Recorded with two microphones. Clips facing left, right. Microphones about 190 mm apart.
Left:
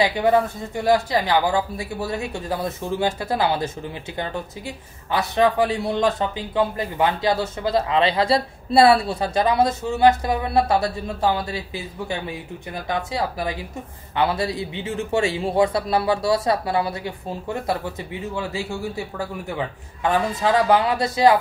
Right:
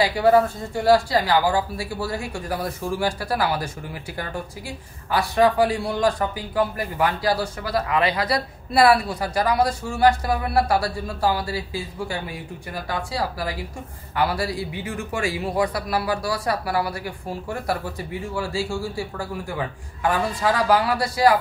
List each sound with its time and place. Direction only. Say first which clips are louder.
0.0 s a woman's voice: right 1 dB; 20° left (ahead or behind)